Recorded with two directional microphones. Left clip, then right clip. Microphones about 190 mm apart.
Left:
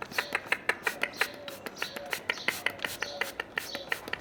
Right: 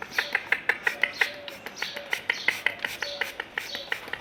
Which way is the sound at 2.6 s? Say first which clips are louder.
Right 4 dB; 15° left (ahead or behind).